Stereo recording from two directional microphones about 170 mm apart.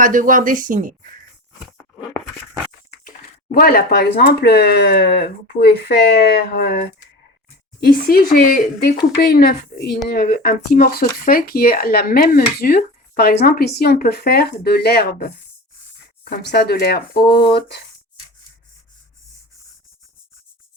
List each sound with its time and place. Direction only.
0.0 s speech: 50° right (ahead or behind)
2.9 s a sound: 55° left (ahead or behind)
4.3 s speech: 75° left (ahead or behind)
7.9 s speech: 60° left (ahead or behind)
16.3 s speech: 75° left (ahead or behind)